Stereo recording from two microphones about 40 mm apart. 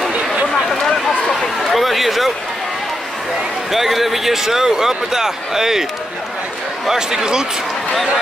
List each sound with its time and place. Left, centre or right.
0.7 s a sound: centre
3.7 s speech: centre
6.9 s speech: centre